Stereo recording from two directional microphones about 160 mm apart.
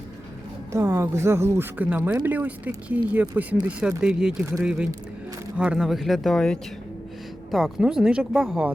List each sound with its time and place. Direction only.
0.7 s speech: 20° right (ahead or behind)